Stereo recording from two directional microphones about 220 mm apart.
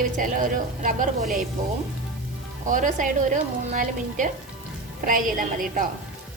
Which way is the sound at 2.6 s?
35° right (ahead or behind).